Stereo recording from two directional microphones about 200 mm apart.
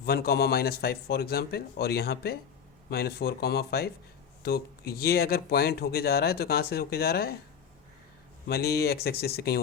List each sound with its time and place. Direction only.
0.0 s speech: 50° left (ahead or behind)
8.4 s speech: 50° left (ahead or behind)